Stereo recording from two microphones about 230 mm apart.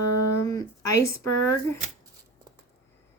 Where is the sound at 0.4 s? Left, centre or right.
Centre.